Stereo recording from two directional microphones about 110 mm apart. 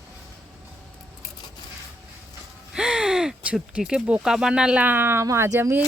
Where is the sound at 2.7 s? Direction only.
5° right (ahead or behind).